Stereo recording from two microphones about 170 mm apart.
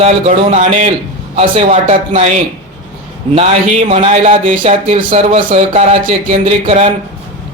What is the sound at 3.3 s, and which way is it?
A man's voice, 40° right (ahead or behind).